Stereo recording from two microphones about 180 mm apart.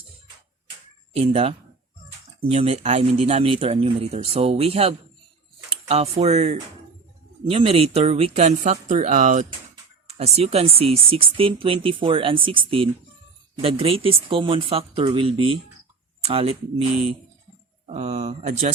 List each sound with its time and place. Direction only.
1.1 s speech: 35° right (ahead or behind)